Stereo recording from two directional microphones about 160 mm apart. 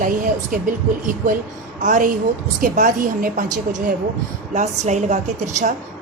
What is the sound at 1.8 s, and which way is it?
A woman's voice, 55° right (ahead or behind).